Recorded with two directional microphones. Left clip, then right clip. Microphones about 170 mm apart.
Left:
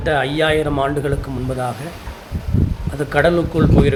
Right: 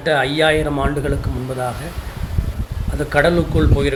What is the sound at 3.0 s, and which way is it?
Speech, 15° left (ahead or behind).